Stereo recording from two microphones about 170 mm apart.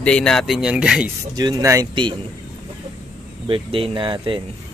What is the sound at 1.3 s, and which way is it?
Speech, 20° right (ahead or behind).